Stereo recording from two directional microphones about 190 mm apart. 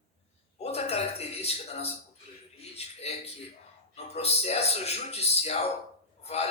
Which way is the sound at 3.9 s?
35° left (ahead or behind).